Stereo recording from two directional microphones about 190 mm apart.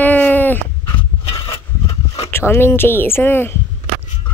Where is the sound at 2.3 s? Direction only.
15° left (ahead or behind).